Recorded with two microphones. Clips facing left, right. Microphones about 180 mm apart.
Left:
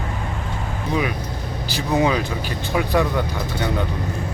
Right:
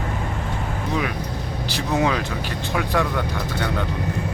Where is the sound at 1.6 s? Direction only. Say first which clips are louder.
Left 2 dB; centre (ahead or behind).